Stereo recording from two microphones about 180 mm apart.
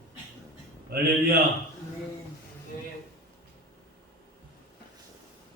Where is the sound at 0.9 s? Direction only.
55° right (ahead or behind).